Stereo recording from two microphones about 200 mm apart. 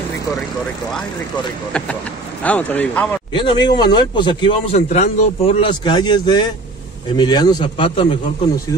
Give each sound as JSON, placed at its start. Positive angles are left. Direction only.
{"t": 2.4, "sound": "speech", "side_deg": 10}
{"t": 3.3, "sound": "speech", "side_deg": 20}